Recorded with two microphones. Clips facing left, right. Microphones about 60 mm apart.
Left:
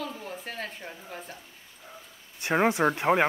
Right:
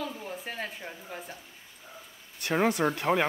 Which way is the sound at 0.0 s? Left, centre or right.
Centre.